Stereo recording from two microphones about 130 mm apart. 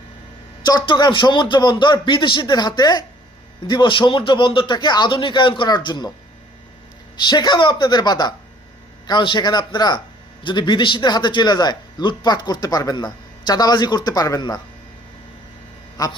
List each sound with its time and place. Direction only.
0.6 s a man's voice: 35° left (ahead or behind)
7.2 s a man's voice: 35° left (ahead or behind)
16.0 s a man's voice: 25° left (ahead or behind)